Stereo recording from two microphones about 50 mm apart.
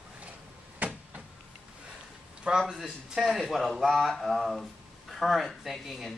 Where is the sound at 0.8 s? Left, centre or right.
Right.